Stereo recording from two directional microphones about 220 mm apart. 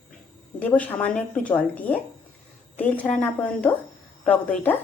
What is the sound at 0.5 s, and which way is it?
A woman's voice, 5° left (ahead or behind).